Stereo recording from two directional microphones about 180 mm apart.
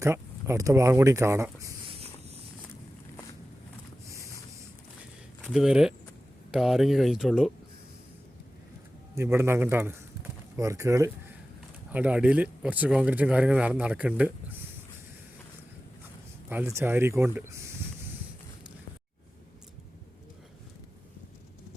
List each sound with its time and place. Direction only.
0.0 s speech: 15° right (ahead or behind)
4.0 s a sound: 15° right (ahead or behind)
5.5 s speech: 5° right (ahead or behind)
9.1 s speech: 15° right (ahead or behind)
16.5 s speech: 10° right (ahead or behind)